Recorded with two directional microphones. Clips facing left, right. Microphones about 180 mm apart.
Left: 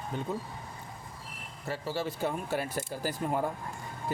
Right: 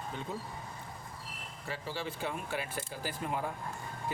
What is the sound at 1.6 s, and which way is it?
Speech, 40° left (ahead or behind).